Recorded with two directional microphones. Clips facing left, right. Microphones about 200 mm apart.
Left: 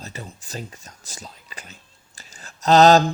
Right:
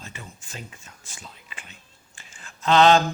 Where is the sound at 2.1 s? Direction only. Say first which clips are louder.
Left 3 dB; 40° left (ahead or behind).